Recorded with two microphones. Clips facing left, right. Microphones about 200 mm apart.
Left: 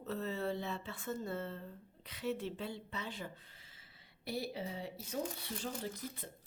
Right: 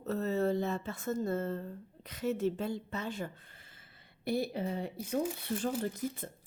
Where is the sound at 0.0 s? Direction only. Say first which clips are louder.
Right 7 dB; 45° right (ahead or behind).